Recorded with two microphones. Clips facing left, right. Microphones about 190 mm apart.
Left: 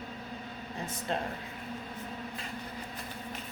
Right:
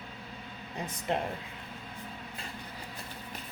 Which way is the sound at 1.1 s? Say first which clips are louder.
Right 3 dB; 20° right (ahead or behind).